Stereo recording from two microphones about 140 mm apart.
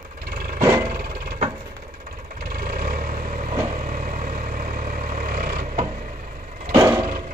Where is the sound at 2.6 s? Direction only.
80° right.